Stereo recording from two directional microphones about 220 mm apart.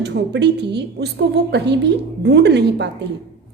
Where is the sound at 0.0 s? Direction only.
50° right (ahead or behind).